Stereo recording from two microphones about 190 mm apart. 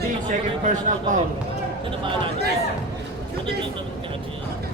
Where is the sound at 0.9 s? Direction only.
40° right (ahead or behind).